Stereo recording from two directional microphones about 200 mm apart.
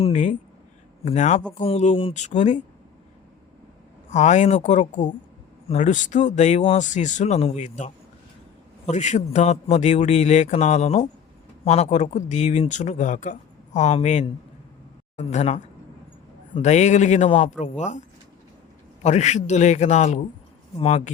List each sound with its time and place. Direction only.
0.0 s speech: 35° left (ahead or behind)
4.1 s speech: 35° left (ahead or behind)
19.0 s speech: 35° left (ahead or behind)